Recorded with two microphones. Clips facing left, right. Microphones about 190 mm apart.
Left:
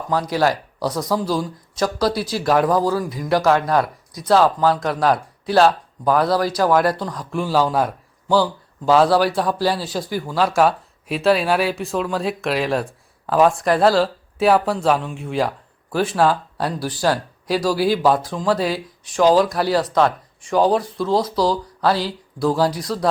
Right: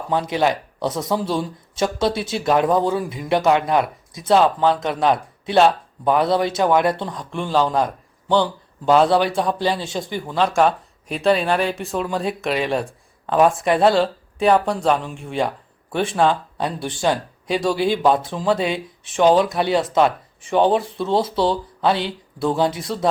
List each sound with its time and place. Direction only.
0.1 s a man's voice: 20° right (ahead or behind)
2.3 s a man's voice: centre (ahead or behind)
2.6 s a man's voice: 25° right (ahead or behind)
4.4 s a man's voice: centre (ahead or behind)
6.1 s a man's voice: 20° right (ahead or behind)
7.1 s a man's voice: centre (ahead or behind)
8.9 s a man's voice: centre (ahead or behind)
21.2 s a man's voice: 25° right (ahead or behind)
22.4 s a man's voice: centre (ahead or behind)